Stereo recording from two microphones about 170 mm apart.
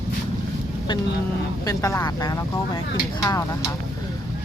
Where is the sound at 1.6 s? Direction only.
20° left (ahead or behind).